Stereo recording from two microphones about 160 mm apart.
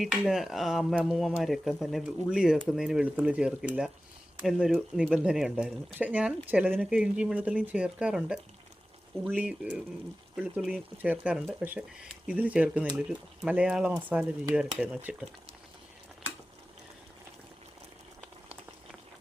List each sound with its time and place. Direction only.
0.0 s speech: centre (ahead or behind)